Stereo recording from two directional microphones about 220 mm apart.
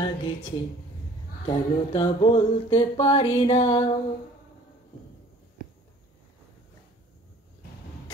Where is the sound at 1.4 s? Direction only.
20° left (ahead or behind).